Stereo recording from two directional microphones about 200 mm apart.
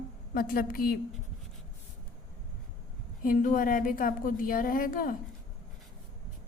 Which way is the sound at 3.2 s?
45° left (ahead or behind).